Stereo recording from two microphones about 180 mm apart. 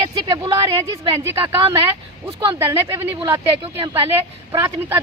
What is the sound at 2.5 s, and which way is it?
Speech, 15° right (ahead or behind).